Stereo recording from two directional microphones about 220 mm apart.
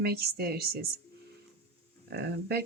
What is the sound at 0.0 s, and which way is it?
Speech, 45° right (ahead or behind).